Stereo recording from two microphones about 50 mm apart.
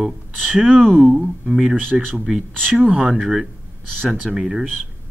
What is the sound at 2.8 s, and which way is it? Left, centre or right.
Speech, centre.